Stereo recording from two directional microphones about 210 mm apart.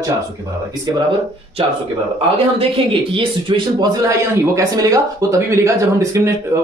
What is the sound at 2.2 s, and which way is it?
A man's voice, 25° right (ahead or behind).